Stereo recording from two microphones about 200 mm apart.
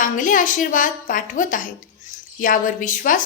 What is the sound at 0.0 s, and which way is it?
A woman's voice, 40° left (ahead or behind).